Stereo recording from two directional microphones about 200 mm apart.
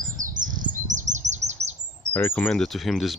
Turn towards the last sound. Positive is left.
turn(degrees=0)  # may be behind; listen again after turning